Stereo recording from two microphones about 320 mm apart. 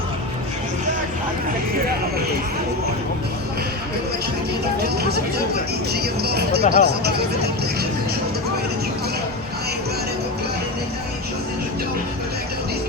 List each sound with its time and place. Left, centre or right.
5.9 s music: right